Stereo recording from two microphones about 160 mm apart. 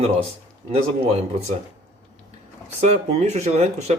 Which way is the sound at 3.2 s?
45° right (ahead or behind).